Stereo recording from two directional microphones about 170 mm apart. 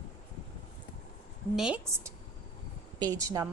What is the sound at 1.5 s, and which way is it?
Speech, 5° right (ahead or behind).